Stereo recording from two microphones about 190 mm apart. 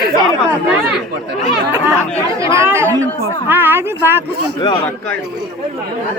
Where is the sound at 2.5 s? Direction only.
15° right (ahead or behind).